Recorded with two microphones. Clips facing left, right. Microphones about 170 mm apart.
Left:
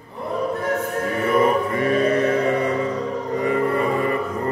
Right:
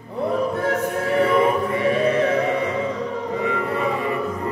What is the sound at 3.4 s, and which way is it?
Music, 50° left (ahead or behind).